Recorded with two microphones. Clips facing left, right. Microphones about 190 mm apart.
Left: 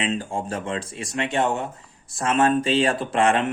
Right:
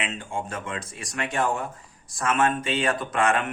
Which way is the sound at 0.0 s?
35° left (ahead or behind).